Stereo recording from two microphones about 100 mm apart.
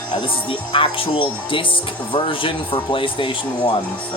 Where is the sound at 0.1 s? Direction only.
60° left (ahead or behind).